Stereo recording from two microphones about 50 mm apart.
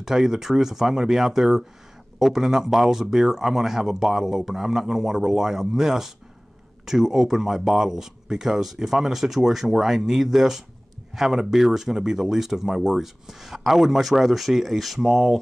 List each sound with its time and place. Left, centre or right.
0.0 s speech: centre